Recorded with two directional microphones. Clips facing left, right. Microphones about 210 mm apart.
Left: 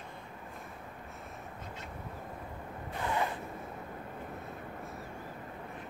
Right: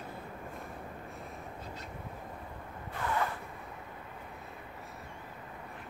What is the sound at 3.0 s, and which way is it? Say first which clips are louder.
Zipper: even; 20° left (ahead or behind).